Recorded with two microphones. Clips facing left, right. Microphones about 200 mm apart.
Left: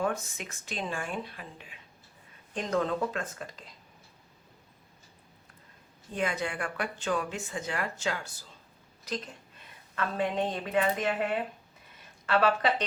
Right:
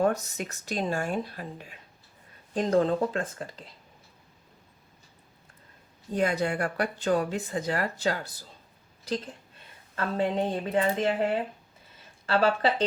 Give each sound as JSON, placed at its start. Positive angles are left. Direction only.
{"t": 0.0, "sound": "speech", "side_deg": -40}
{"t": 6.1, "sound": "a woman's voice", "side_deg": -40}